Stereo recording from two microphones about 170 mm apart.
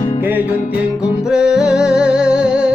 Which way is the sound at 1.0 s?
5° right (ahead or behind).